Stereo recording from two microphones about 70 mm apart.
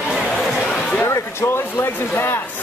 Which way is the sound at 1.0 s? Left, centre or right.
Left.